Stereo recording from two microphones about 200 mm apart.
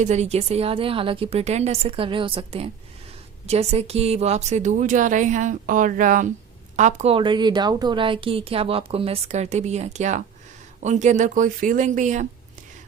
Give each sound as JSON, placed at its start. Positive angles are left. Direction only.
{"t": 0.0, "sound": "a woman's voice", "side_deg": -35}